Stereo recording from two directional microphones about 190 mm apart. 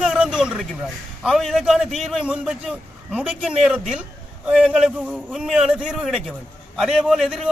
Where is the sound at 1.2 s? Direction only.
Centre (ahead or behind).